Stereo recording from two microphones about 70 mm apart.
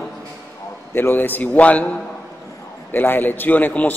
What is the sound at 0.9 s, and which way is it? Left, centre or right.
Speech, left.